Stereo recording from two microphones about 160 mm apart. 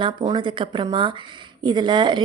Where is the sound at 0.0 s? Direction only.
30° right (ahead or behind).